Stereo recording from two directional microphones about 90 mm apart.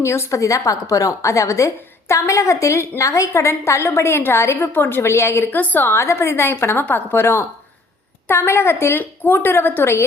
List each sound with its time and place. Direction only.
0.0 s a woman's voice: 30° left (ahead or behind)
5.5 s a woman's voice: 20° left (ahead or behind)